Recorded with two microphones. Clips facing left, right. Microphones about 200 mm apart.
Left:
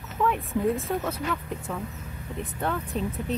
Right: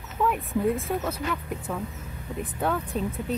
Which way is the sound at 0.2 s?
Centre (ahead or behind).